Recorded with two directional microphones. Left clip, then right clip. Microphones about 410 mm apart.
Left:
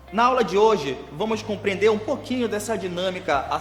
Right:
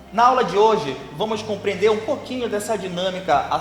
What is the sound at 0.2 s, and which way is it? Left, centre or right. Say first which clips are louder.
A man's voice: right 3 dB; left.